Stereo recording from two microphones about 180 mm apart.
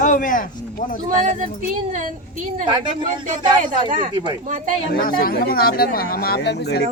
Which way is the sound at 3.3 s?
50° right (ahead or behind).